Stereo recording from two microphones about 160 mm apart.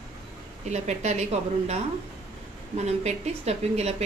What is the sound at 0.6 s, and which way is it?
A woman's voice, 45° right (ahead or behind).